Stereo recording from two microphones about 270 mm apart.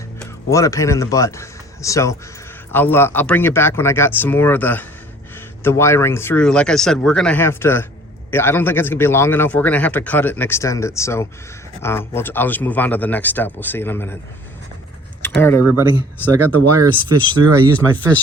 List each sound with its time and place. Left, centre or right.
0.2 s a man's voice: centre
15.2 s speech: centre
15.6 s speech: centre
16.8 s speech: centre
17.7 s speech: centre